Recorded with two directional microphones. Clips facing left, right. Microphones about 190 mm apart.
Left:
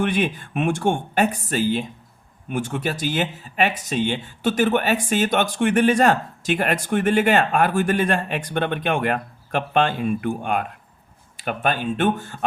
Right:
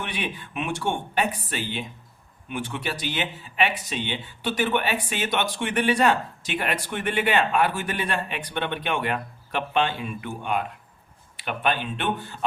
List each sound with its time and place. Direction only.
0.0 s speech: 45° left (ahead or behind)